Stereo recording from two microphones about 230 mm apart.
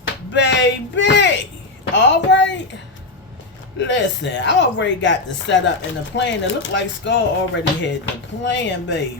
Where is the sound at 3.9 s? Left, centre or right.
Left.